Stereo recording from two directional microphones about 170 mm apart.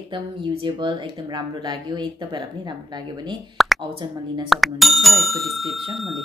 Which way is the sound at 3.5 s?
Centre (ahead or behind).